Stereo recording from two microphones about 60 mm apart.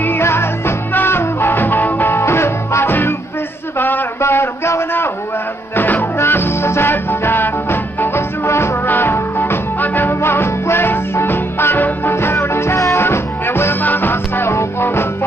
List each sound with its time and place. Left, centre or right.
0.2 s music: left
3.7 s a sound: left
4.2 s a sound: left
5.8 s music: left
8.5 s music: left
8.8 s music: left
14.5 s music: left